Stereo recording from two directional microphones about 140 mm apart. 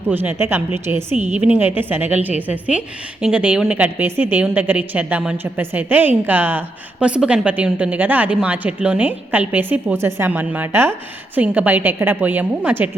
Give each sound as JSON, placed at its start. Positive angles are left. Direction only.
{"t": 0.1, "sound": "a woman's voice", "side_deg": -15}